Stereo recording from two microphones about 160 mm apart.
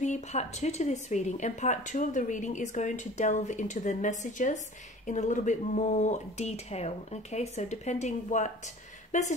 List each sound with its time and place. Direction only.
0.0 s speech: 45° left (ahead or behind)